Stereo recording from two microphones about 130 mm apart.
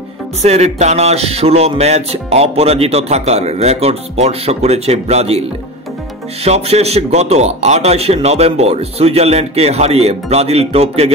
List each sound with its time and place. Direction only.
0.4 s speech: 55° right (ahead or behind)
6.4 s speech: 55° right (ahead or behind)